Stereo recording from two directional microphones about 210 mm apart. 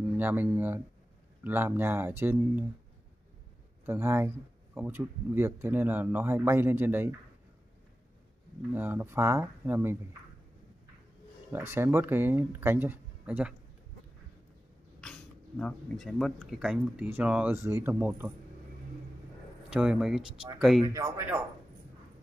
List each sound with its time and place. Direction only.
0.2 s speech: 10° right (ahead or behind)
3.8 s speech: 10° right (ahead or behind)
8.7 s speech: 10° right (ahead or behind)
11.5 s speech: 10° right (ahead or behind)
15.6 s speech: centre (ahead or behind)
19.7 s speech: 5° right (ahead or behind)
20.8 s speech: 15° right (ahead or behind)